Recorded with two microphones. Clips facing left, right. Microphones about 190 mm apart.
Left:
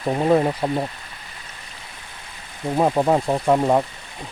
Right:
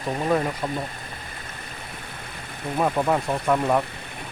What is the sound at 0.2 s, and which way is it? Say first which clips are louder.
Speech: left 6 dB; 25° left (ahead or behind).